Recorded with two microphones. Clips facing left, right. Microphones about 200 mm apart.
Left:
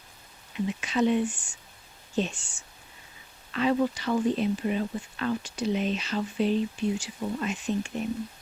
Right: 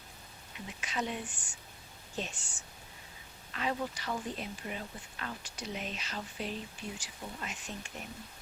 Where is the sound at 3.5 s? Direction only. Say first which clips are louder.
Left 11 dB; 90° left.